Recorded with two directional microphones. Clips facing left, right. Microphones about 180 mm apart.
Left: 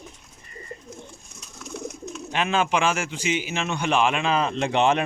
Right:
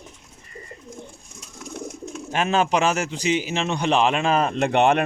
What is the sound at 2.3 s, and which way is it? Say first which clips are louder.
A man's voice: right 2 dB; 40° right (ahead or behind).